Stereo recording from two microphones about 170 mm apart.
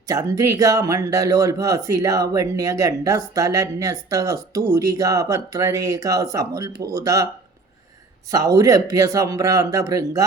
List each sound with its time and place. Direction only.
0.1 s speech: 20° right (ahead or behind)
8.5 s speech: 20° right (ahead or behind)